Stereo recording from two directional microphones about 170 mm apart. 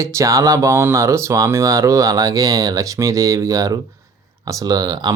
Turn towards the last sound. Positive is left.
turn(degrees=-25)  # may be behind; listen again after turning